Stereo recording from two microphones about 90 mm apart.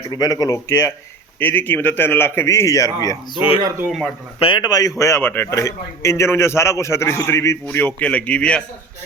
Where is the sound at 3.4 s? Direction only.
85° left.